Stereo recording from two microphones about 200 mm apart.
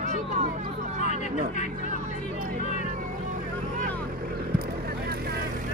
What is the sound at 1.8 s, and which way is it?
Music, 40° right (ahead or behind).